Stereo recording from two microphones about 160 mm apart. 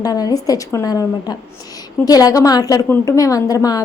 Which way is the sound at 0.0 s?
25° left (ahead or behind).